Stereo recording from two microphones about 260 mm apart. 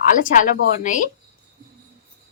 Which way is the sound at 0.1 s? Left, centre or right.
Left.